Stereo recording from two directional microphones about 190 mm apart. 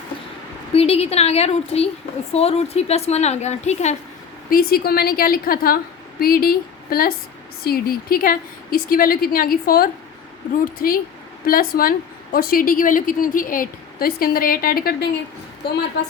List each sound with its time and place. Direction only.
0.7 s a woman's voice: 30° left (ahead or behind)
4.4 s a woman's voice: 50° left (ahead or behind)
16.0 s a woman's voice: 65° left (ahead or behind)